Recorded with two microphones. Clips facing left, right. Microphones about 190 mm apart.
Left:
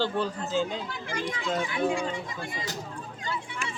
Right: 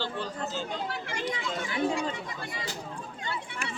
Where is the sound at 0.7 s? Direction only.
60° right (ahead or behind).